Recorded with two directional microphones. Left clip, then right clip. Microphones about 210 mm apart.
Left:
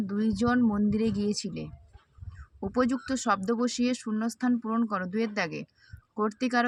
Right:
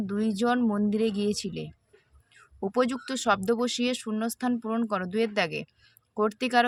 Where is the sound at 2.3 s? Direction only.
30° right (ahead or behind).